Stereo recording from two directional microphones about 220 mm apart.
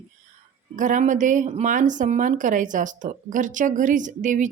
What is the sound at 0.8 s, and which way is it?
Speech, 35° right (ahead or behind).